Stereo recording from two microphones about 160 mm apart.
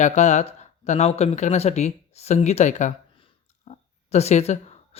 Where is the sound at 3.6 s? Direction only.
40° left (ahead or behind).